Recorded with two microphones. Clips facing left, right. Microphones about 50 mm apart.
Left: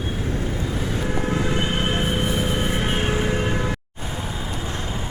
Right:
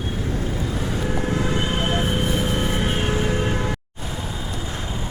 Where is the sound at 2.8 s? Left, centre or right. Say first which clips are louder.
Even; centre.